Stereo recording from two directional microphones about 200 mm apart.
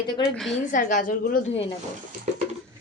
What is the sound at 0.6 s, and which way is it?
Speech, 40° left (ahead or behind).